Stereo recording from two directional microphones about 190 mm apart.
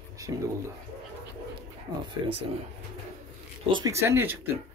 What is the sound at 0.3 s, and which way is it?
Speech, 20° right (ahead or behind).